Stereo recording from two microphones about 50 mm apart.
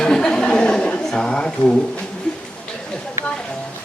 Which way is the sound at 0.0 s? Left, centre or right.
Centre.